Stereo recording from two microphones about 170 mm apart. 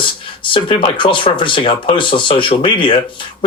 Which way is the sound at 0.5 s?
30° left (ahead or behind).